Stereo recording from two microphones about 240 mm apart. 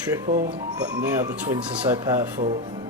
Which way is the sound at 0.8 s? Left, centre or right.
Centre.